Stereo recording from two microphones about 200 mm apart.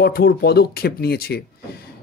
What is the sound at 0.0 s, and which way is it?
A man's voice, 50° left (ahead or behind).